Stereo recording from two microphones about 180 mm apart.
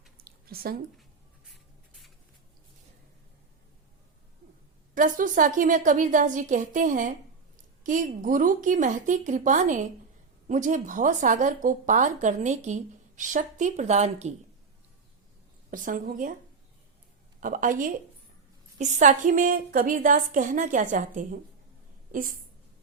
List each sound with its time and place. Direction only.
0.2 s squish: 55° right (ahead or behind)
1.5 s writing: centre (ahead or behind)
4.9 s a woman's voice: 45° right (ahead or behind)
15.7 s a woman's voice: 50° right (ahead or behind)
17.4 s a woman's voice: 45° right (ahead or behind)